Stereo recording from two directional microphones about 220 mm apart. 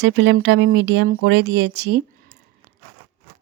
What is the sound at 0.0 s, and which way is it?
Speech, 55° right (ahead or behind).